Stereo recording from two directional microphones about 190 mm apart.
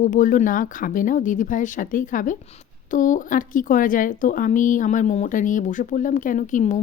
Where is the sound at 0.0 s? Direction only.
40° left (ahead or behind).